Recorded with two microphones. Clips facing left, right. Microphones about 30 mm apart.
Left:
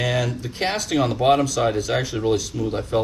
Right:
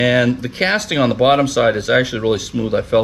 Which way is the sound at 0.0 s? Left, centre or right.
Right.